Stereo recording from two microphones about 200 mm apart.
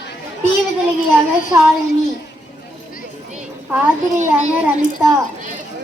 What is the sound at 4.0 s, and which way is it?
Speech, 35° right (ahead or behind).